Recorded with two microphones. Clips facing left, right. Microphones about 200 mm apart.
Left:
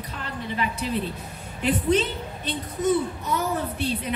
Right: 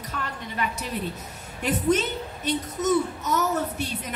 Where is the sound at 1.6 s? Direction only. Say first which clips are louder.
Left 1 dB; 45° right (ahead or behind).